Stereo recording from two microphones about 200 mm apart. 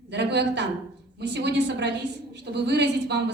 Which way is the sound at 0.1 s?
60° right (ahead or behind).